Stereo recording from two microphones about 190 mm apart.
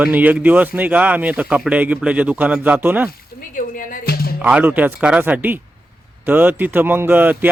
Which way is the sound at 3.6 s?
45° left (ahead or behind).